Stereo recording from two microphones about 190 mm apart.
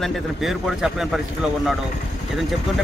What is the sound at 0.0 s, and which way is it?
Speech, centre (ahead or behind).